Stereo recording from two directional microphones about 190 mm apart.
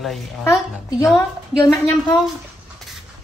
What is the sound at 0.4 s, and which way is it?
A woman's voice, 15° left (ahead or behind).